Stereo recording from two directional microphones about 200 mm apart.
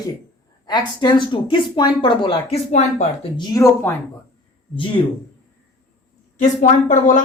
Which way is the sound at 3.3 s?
20° left (ahead or behind).